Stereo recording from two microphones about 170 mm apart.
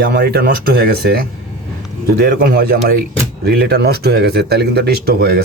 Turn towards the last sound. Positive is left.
turn(degrees=-65)  # may be behind; listen again after turning